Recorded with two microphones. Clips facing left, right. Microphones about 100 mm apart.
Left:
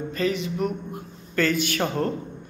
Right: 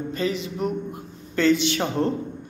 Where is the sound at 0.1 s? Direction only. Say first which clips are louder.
Left 2 dB; 30° right (ahead or behind).